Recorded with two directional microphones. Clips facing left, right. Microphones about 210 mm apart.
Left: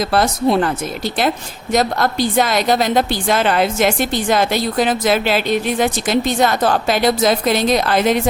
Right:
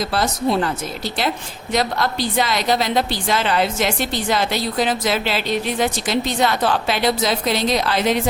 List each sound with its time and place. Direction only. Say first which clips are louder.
0.1 s speech: left 6 dB; 55° left (ahead or behind)
1.7 s a woman's voice: left 4 dB; 45° left (ahead or behind)